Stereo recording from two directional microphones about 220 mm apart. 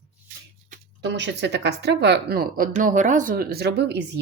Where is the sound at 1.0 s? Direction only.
50° right (ahead or behind).